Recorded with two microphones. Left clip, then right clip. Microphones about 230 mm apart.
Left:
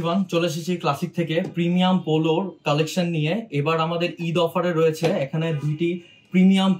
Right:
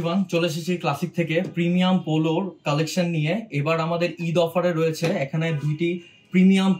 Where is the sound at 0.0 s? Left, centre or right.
Centre.